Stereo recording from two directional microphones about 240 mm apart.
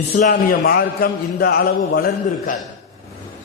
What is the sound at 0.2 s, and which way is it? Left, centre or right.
A man's voice, left.